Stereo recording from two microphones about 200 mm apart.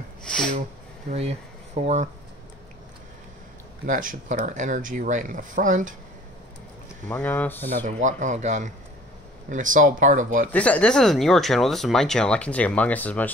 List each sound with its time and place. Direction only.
1.1 s speech: 50° right (ahead or behind)
1.8 s speech: 30° right (ahead or behind)
3.8 s speech: 40° right (ahead or behind)
7.1 s speech: 10° left (ahead or behind)
7.8 s speech: 40° right (ahead or behind)
10.5 s speech: 5° left (ahead or behind)